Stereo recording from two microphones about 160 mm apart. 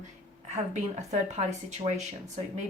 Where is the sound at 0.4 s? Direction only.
45° right (ahead or behind).